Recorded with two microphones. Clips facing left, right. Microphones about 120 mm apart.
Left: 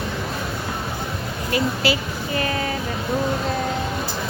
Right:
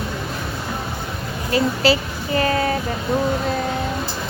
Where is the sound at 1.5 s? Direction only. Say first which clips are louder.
Right 4 dB; 35° right (ahead or behind).